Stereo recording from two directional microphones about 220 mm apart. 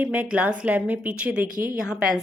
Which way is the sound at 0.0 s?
5° right (ahead or behind).